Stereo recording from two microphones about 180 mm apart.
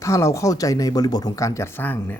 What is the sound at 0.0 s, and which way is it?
Speech, 15° left (ahead or behind).